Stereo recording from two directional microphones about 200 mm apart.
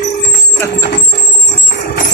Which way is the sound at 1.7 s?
55° left (ahead or behind).